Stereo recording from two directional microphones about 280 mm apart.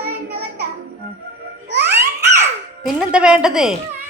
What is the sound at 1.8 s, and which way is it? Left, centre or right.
Babbling, centre.